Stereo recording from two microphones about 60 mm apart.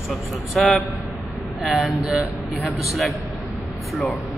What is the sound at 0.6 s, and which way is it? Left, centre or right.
Speech, centre.